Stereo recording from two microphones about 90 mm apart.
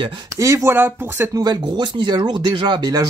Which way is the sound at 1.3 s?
50° right (ahead or behind).